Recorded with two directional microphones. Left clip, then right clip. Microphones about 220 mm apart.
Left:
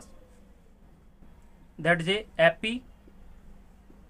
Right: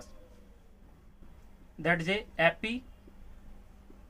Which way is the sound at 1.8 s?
35° left (ahead or behind).